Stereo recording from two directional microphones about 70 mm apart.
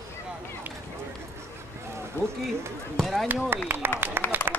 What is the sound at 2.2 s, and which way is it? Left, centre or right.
Run, left.